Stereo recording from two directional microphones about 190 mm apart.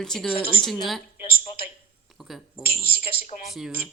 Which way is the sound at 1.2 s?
55° left (ahead or behind).